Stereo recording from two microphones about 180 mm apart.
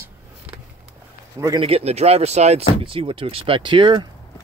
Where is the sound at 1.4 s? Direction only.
25° right (ahead or behind).